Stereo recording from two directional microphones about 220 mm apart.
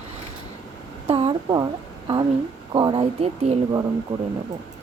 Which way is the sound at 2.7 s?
20° right (ahead or behind).